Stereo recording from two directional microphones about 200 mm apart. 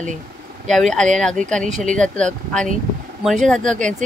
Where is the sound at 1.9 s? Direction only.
5° left (ahead or behind).